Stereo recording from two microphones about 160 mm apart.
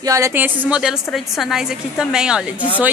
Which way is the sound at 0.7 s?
5° right (ahead or behind).